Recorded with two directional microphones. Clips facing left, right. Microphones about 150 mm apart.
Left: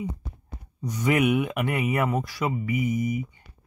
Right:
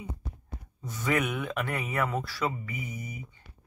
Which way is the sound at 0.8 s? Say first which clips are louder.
Left 7 dB; 15° left (ahead or behind).